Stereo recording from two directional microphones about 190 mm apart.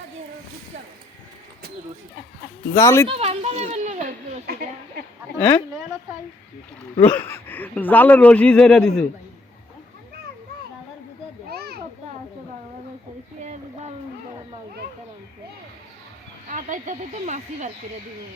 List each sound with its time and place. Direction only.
2.7 s speech: 15° left (ahead or behind)
3.1 s speech: 35° right (ahead or behind); by 5.0 s 50° right (ahead or behind)
5.4 s speech: 10° left (ahead or behind)
7.0 s speech: 10° left (ahead or behind)
11.4 s children playing: 55° right (ahead or behind)
13.4 s a sound: 35° right (ahead or behind)
16.5 s speech: 40° right (ahead or behind)